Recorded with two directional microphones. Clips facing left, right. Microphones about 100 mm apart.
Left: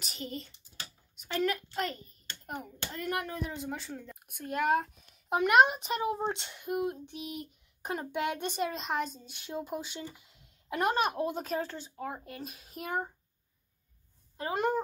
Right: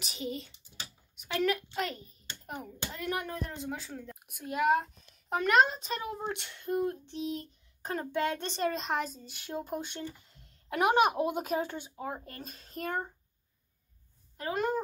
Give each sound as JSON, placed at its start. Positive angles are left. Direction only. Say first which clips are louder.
{"t": 0.0, "sound": "a child's voice", "louder": "right 3 dB", "side_deg": 0}
{"t": 5.4, "sound": "a child's voice", "louder": "left 2 dB", "side_deg": 15}
{"t": 10.8, "sound": "speech", "louder": "right 4 dB", "side_deg": -10}
{"t": 14.3, "sound": "speech", "louder": "left 1 dB", "side_deg": 25}